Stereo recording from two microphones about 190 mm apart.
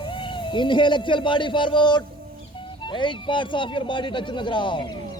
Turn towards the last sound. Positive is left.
turn(degrees=25)  # may be behind; listen again after turning